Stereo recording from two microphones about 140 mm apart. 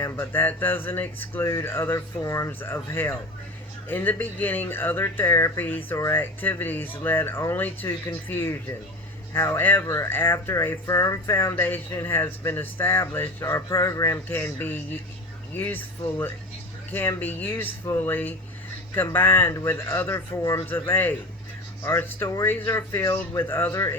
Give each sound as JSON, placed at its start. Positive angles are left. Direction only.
{"t": 0.0, "sound": "speech", "side_deg": 15}